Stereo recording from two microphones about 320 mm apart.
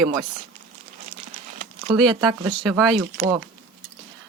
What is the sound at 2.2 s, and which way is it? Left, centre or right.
Speech, centre.